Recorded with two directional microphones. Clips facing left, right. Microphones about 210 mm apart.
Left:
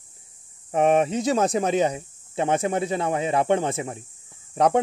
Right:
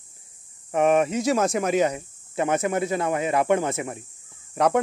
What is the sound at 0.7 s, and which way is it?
Speech, 30° left (ahead or behind).